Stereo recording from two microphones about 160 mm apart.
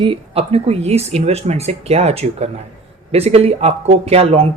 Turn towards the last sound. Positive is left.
turn(degrees=-40)  # may be behind; listen again after turning